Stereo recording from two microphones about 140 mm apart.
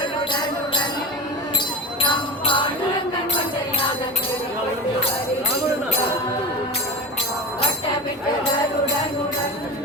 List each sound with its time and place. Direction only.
2.0 s jingle bell: 35° left (ahead or behind)